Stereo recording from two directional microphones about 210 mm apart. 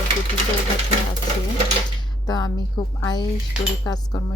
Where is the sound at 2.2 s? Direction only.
20° left (ahead or behind).